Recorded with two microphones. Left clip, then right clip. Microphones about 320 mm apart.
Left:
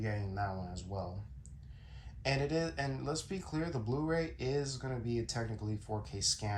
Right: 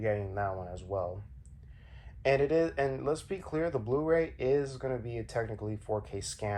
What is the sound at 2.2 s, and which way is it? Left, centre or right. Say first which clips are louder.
Speech: right 8 dB; centre.